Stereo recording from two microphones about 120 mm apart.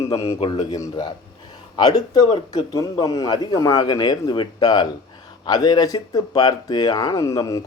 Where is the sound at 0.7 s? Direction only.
35° left (ahead or behind).